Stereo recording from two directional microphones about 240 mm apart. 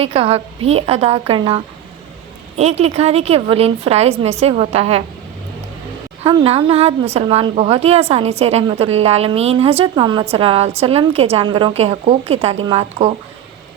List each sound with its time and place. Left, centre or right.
0.0 s a woman's voice: right
6.2 s a woman's voice: right